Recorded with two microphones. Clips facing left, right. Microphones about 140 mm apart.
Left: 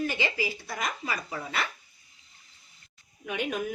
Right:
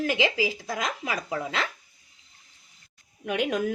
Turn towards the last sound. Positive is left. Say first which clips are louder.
# right 5 dB
turn(degrees=-90)